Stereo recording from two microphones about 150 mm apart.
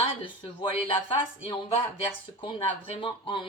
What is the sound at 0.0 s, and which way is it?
Speech, 35° left (ahead or behind).